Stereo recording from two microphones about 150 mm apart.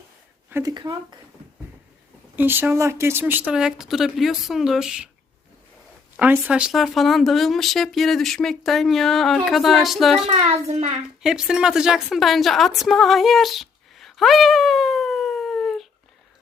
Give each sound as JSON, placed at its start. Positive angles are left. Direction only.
{"t": 0.5, "sound": "speech", "side_deg": -25}
{"t": 2.3, "sound": "speech", "side_deg": -15}
{"t": 6.1, "sound": "speech", "side_deg": -10}
{"t": 10.2, "sound": "a child's voice", "side_deg": -45}
{"t": 11.2, "sound": "a woman's voice", "side_deg": -5}